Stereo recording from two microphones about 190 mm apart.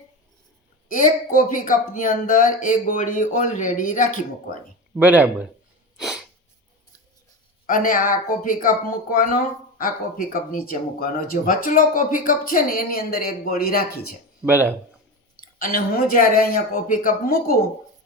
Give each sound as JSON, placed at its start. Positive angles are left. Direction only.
{"t": 0.9, "sound": "speech", "side_deg": 45}
{"t": 4.9, "sound": "speech", "side_deg": -10}
{"t": 6.0, "sound": "sneeze", "side_deg": 0}
{"t": 7.7, "sound": "speech", "side_deg": 45}
{"t": 14.4, "sound": "speech", "side_deg": -10}
{"t": 15.5, "sound": "speech", "side_deg": 50}